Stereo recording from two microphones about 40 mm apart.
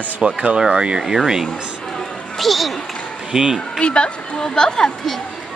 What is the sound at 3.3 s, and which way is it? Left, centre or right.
Speech, centre.